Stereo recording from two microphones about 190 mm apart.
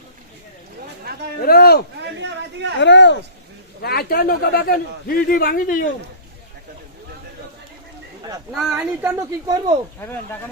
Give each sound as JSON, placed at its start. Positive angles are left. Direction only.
{"t": 1.4, "sound": "a man's voice", "side_deg": 50}
{"t": 2.0, "sound": "a sound", "side_deg": -65}
{"t": 2.8, "sound": "speech", "side_deg": 70}
{"t": 3.8, "sound": "a man's voice", "side_deg": 55}
{"t": 8.5, "sound": "speech", "side_deg": -5}